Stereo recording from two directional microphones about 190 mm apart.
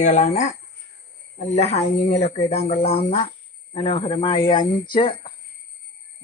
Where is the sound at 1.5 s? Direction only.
35° left (ahead or behind).